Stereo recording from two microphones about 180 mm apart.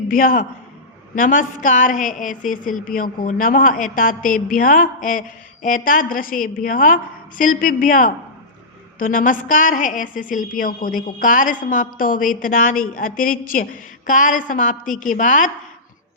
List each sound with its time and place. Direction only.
0.1 s a woman's voice: 50° left (ahead or behind)